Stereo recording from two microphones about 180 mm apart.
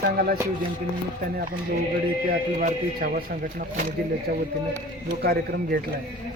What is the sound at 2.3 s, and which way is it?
Speech, 55° right (ahead or behind).